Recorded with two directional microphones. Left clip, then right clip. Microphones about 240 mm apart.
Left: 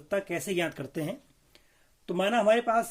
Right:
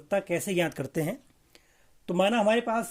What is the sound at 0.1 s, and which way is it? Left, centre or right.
Speech, right.